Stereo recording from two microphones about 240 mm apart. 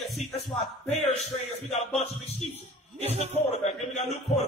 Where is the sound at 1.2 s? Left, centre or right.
Left.